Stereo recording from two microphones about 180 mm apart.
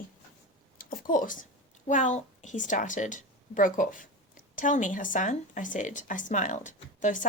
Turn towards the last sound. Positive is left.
turn(degrees=45)  # may be behind; listen again after turning